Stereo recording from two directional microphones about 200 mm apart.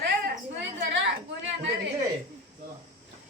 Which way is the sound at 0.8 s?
60° right (ahead or behind).